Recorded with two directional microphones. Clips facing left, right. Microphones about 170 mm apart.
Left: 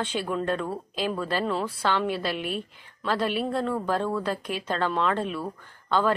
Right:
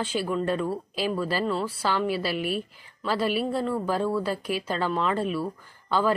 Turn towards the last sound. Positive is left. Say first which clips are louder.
# even
turn(degrees=-5)  # may be behind; listen again after turning